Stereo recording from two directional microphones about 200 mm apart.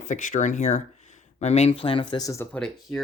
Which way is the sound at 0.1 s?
40° left (ahead or behind).